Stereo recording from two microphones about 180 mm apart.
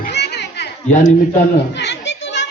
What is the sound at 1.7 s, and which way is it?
Children playing, 70° left (ahead or behind).